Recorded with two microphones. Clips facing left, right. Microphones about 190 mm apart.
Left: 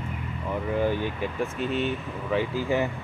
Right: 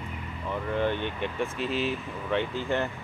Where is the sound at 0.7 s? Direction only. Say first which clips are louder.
Left 2 dB; 5° left (ahead or behind).